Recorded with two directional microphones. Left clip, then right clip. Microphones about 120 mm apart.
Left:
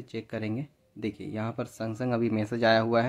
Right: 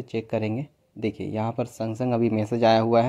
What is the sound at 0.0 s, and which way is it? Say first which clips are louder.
Speech: right 8 dB; 25° right (ahead or behind).